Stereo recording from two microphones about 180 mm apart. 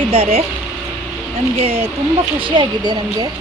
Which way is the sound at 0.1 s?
30° right (ahead or behind).